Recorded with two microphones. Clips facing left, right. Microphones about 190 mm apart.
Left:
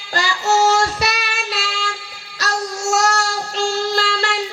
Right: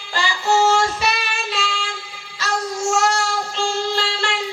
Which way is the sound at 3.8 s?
40° left (ahead or behind).